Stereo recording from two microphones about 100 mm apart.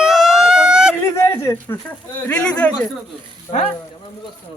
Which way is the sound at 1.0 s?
25° left (ahead or behind).